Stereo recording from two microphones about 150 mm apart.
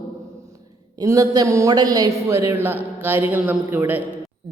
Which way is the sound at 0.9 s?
20° right (ahead or behind).